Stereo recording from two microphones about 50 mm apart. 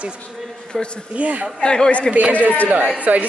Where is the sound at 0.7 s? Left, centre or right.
Centre.